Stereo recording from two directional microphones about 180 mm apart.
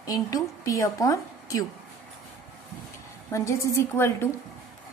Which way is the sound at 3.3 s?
15° left (ahead or behind).